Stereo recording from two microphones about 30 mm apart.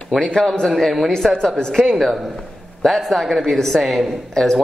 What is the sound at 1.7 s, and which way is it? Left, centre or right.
A woman's voice, centre.